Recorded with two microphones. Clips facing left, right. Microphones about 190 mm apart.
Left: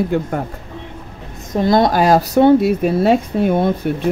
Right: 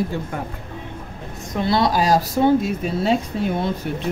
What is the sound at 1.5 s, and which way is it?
Speech, 45° left (ahead or behind).